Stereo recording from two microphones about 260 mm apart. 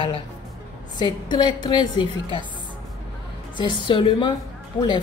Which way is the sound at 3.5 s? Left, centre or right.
Centre.